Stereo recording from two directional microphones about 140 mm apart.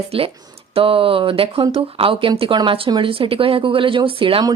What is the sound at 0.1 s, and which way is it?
Speech, 40° right (ahead or behind).